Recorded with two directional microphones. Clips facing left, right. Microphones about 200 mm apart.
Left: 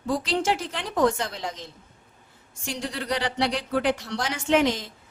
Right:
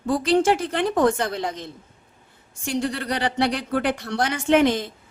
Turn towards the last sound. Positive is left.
turn(degrees=-55)  # may be behind; listen again after turning